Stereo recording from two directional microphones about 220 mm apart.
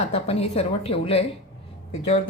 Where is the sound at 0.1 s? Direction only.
30° left (ahead or behind).